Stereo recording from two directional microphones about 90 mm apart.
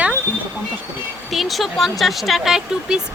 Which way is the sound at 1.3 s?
Centre (ahead or behind).